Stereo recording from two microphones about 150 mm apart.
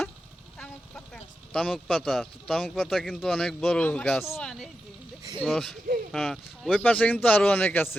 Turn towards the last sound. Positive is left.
turn(degrees=15)  # may be behind; listen again after turning